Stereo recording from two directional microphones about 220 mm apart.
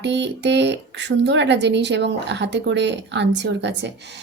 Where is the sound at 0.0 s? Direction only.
50° right (ahead or behind).